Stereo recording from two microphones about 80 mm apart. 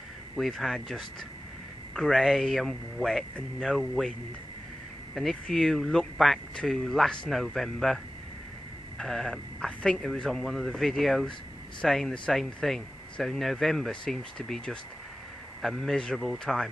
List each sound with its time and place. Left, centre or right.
0.4 s speech: centre
5.1 s speech: centre